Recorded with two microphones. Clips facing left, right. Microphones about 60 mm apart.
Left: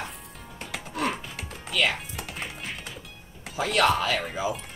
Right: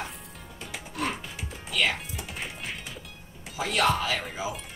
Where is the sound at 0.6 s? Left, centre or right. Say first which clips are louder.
Left 3 dB; left.